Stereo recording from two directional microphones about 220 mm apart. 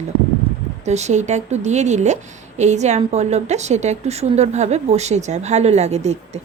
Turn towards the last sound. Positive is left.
turn(degrees=-30)  # may be behind; listen again after turning